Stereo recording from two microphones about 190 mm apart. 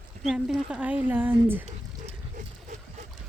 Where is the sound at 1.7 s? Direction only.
40° right (ahead or behind).